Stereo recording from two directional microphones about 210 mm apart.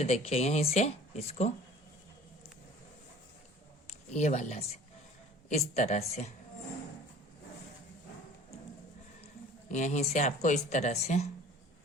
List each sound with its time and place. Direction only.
0.0 s speech: 30° left (ahead or behind)
3.8 s speech: 30° left (ahead or behind)
9.6 s speech: 35° left (ahead or behind)